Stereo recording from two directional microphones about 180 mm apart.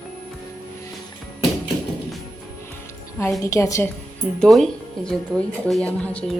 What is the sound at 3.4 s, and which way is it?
Speech, 15° left (ahead or behind).